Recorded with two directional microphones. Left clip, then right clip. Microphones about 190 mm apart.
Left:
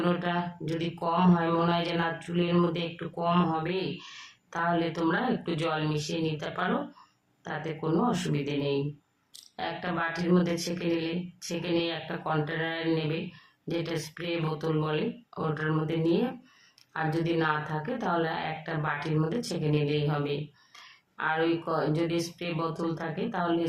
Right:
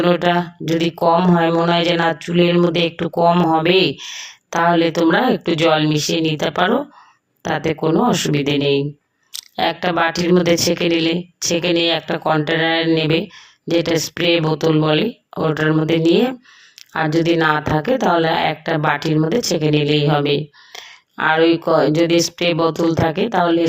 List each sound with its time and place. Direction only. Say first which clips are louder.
0.0 s a woman's voice: right 14 dB; 40° right (ahead or behind)
3.6 s a woman's voice: right 17 dB; 45° right (ahead or behind)